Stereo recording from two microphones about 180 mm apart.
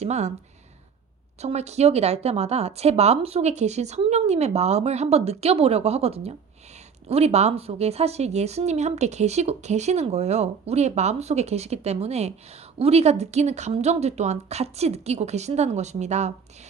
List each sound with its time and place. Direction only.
0.0 s speech: 35° right (ahead or behind)
1.4 s speech: 35° right (ahead or behind)